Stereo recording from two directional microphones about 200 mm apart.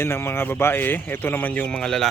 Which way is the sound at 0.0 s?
10° left (ahead or behind).